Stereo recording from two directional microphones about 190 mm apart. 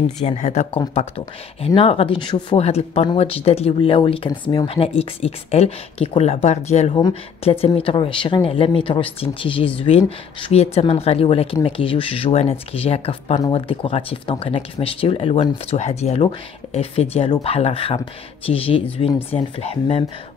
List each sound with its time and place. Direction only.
0.2 s speech: 35° left (ahead or behind)